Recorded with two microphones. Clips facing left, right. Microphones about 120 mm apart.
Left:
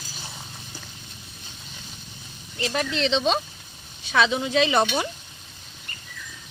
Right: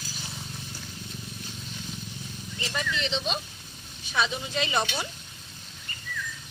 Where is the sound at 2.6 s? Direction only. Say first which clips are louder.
Left 7 dB; 75° left (ahead or behind).